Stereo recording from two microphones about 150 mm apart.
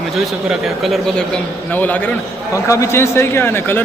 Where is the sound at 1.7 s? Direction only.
10° left (ahead or behind).